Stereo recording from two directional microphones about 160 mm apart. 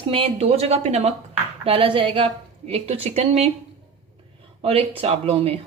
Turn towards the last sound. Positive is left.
turn(degrees=-40)  # may be behind; listen again after turning